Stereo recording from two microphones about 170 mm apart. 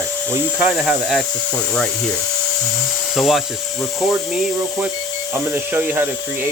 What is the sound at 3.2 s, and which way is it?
Speech, centre (ahead or behind).